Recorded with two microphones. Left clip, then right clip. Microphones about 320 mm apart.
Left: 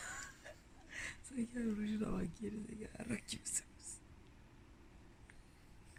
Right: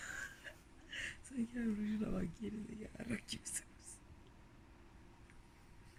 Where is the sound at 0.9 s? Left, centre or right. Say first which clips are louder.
Right 1 dB; centre.